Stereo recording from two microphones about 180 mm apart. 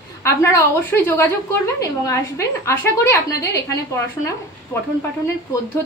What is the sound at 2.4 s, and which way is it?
A woman's voice, 15° left (ahead or behind).